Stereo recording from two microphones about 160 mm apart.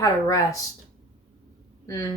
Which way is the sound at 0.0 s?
20° left (ahead or behind).